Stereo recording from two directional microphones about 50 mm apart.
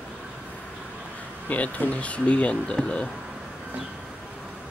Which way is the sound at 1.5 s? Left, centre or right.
Left.